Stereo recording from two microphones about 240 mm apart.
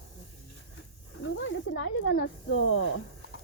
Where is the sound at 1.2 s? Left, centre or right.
Left.